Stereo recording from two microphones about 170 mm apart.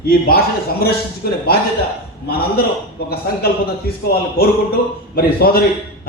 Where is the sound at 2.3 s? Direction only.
60° left (ahead or behind).